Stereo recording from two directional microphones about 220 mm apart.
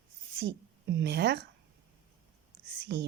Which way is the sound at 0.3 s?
55° right (ahead or behind).